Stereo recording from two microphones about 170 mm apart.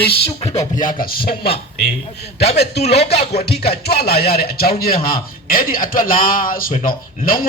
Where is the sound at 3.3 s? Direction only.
70° left (ahead or behind).